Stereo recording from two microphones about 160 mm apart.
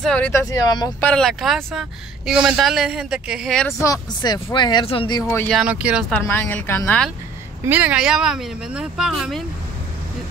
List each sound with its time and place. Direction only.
0.3 s speech: 20° left (ahead or behind)
1.0 s a woman's voice: 5° left (ahead or behind)
3.8 s speech: 25° left (ahead or behind)
5.5 s a woman's voice: 5° right (ahead or behind)
6.1 s a woman's voice: 10° left (ahead or behind)
7.6 s a woman's voice: 10° right (ahead or behind)